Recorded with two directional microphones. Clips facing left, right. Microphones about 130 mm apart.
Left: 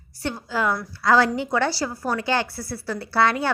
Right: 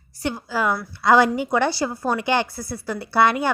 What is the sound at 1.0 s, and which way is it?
A woman's voice, 15° right (ahead or behind).